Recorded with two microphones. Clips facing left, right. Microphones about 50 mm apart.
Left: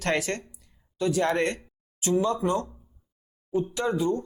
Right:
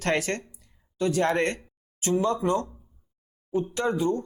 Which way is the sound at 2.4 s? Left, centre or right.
Centre.